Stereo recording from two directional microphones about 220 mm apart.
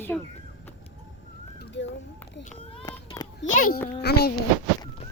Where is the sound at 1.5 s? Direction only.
55° left (ahead or behind).